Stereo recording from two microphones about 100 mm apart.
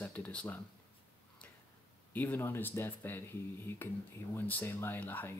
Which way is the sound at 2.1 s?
20° left (ahead or behind).